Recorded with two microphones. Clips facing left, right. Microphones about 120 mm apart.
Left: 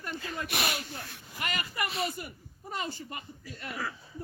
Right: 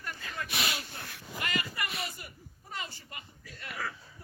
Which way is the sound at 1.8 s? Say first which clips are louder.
Left 6 dB; 30° left (ahead or behind).